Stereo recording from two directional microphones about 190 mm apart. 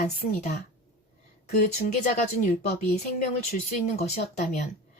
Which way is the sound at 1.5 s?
40° left (ahead or behind).